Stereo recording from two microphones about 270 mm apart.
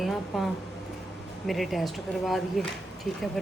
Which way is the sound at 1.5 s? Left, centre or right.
Centre.